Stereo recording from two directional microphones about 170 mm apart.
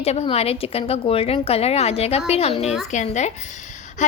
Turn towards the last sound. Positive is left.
turn(degrees=45)  # may be behind; listen again after turning